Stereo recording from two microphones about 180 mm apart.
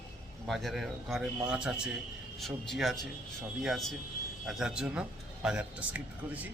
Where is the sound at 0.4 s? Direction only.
Centre (ahead or behind).